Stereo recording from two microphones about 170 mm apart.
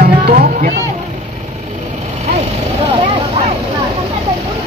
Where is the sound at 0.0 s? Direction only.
55° right (ahead or behind).